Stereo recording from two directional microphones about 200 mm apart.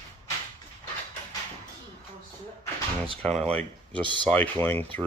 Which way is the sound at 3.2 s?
5° left (ahead or behind).